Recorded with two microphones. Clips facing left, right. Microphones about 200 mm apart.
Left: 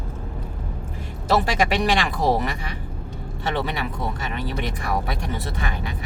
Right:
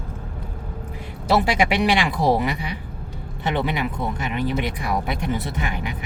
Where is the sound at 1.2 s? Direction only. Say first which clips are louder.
Right 1 dB; 15° right (ahead or behind).